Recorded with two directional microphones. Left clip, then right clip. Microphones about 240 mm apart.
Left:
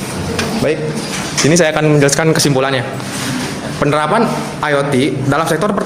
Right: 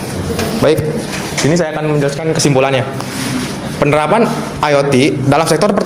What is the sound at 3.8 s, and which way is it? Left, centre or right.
A man's voice, centre.